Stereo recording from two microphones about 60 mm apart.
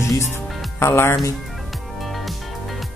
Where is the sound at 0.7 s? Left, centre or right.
Left.